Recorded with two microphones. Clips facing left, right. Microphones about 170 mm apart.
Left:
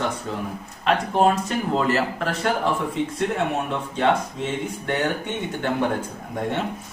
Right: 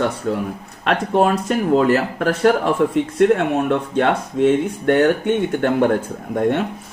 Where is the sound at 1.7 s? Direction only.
45° right (ahead or behind).